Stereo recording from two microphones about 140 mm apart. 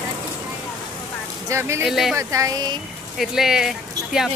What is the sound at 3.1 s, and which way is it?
Speech, centre (ahead or behind).